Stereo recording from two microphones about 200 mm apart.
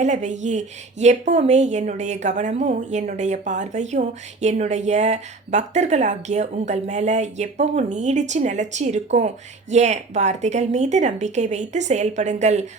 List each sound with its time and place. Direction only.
0.0 s speech: 35° right (ahead or behind)